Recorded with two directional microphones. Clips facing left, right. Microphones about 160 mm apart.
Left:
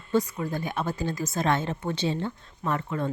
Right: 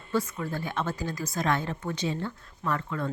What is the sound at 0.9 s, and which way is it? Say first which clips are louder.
A woman's voice: left 3 dB; 25° left (ahead or behind).